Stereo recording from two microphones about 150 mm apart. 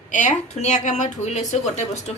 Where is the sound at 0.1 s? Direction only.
55° left (ahead or behind).